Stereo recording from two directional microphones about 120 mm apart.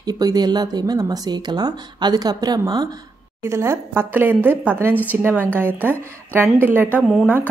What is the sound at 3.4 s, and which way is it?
A woman's voice, 20° right (ahead or behind).